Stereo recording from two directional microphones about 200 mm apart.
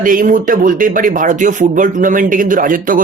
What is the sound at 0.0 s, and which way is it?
Speech, 40° right (ahead or behind).